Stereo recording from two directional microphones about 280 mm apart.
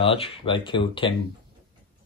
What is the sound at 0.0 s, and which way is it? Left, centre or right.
Speech, centre.